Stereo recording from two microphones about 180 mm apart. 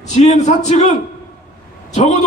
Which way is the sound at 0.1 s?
40° left (ahead or behind).